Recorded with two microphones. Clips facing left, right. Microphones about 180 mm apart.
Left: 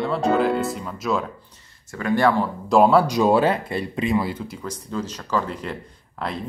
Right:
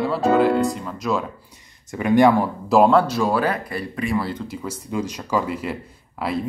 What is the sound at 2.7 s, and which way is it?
Speech, 5° left (ahead or behind).